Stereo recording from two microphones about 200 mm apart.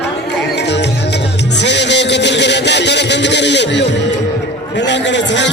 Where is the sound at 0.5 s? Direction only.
60° left (ahead or behind).